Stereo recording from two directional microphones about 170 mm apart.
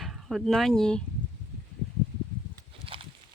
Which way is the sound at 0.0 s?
Centre (ahead or behind).